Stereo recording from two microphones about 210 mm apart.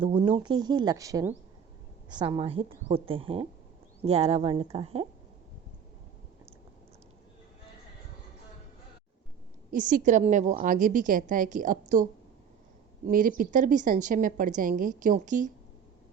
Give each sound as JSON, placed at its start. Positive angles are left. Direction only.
{"t": 0.0, "sound": "speech", "side_deg": -25}
{"t": 2.1, "sound": "speech", "side_deg": -25}
{"t": 9.7, "sound": "a woman's voice", "side_deg": -40}
{"t": 13.1, "sound": "a woman's voice", "side_deg": -40}